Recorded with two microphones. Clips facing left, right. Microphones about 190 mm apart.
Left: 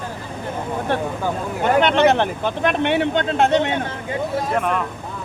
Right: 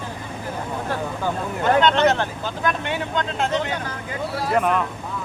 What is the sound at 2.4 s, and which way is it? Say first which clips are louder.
Speech: left 5 dB; 65° left (ahead or behind).